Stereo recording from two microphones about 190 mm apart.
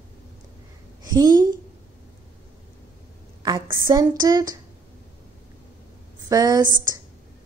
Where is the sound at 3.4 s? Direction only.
20° right (ahead or behind).